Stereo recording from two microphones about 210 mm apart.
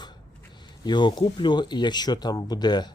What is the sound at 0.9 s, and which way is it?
Speech, 20° left (ahead or behind).